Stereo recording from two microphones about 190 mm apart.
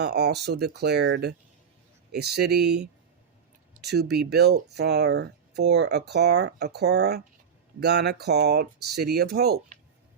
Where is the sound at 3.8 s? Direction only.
60° right (ahead or behind).